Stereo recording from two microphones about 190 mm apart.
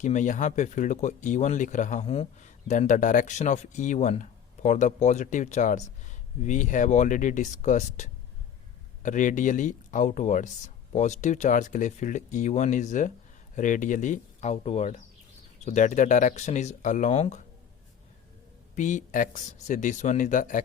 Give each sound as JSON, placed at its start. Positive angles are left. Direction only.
{"t": 0.0, "sound": "speech", "side_deg": 40}
{"t": 18.7, "sound": "speech", "side_deg": 40}